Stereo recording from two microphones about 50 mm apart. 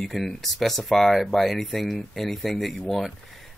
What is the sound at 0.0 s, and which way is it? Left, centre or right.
Speech, centre.